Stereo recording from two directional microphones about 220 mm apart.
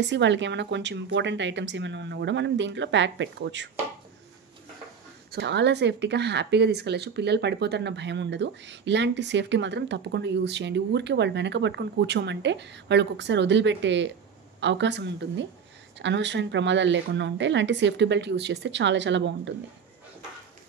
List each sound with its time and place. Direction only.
0.1 s speech: 55° right (ahead or behind)
5.3 s a woman's voice: 50° right (ahead or behind)